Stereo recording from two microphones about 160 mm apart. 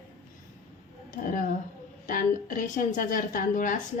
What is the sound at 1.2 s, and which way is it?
A woman's voice, 55° left (ahead or behind).